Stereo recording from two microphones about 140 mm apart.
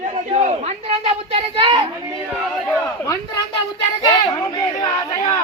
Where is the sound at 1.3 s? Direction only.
40° right (ahead or behind).